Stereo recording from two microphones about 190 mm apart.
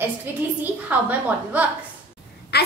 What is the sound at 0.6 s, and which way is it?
A woman's voice, 10° right (ahead or behind).